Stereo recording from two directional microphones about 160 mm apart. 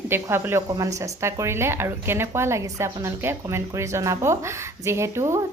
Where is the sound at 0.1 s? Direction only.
15° right (ahead or behind).